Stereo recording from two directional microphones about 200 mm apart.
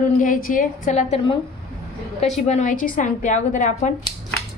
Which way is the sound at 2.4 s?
35° left (ahead or behind).